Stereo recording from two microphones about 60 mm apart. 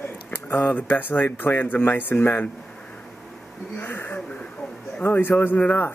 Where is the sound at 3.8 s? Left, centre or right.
Left.